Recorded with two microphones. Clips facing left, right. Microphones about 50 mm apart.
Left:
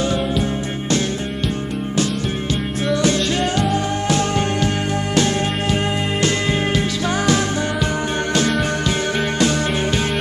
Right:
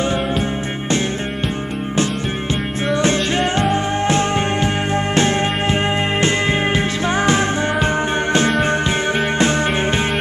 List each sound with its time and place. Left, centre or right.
2.9 s music: right